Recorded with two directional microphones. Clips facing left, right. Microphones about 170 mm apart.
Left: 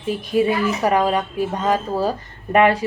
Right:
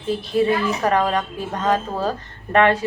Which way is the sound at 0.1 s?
10° left (ahead or behind).